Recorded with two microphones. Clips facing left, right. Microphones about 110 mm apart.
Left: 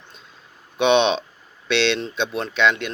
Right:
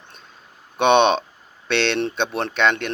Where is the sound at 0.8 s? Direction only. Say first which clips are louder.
Right 2 dB; 50° right (ahead or behind).